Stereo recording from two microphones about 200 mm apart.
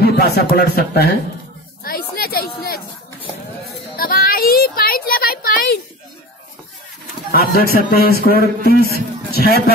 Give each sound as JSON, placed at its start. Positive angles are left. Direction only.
{"t": 0.0, "sound": "speech", "side_deg": 50}
{"t": 1.8, "sound": "a sound", "side_deg": 50}
{"t": 3.9, "sound": "child singing", "side_deg": 45}
{"t": 7.2, "sound": "a man's voice", "side_deg": 50}